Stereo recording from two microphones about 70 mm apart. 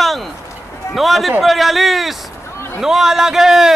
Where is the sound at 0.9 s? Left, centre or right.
Centre.